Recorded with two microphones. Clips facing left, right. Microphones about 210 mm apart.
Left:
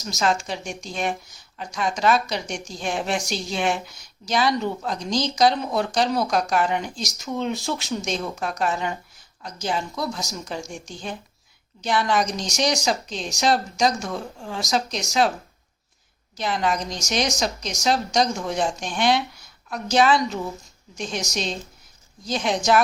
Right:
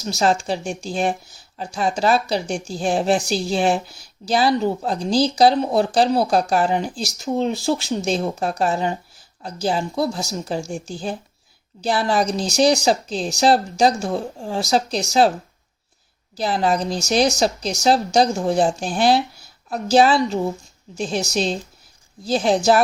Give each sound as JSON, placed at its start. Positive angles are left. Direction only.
{"t": 0.0, "sound": "speech", "side_deg": -35}
{"t": 16.4, "sound": "speech", "side_deg": -35}